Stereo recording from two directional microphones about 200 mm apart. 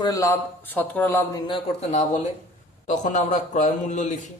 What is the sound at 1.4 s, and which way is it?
Speech, 25° left (ahead or behind).